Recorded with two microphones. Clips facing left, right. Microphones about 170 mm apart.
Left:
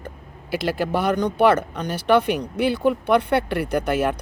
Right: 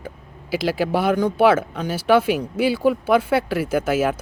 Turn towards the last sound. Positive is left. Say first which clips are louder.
# right 1 dB
turn(degrees=-5)  # may be behind; listen again after turning